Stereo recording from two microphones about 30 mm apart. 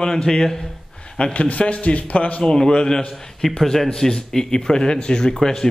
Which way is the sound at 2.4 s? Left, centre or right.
Left.